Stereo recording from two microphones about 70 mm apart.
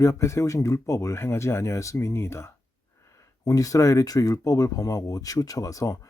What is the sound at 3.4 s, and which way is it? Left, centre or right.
Speech, left.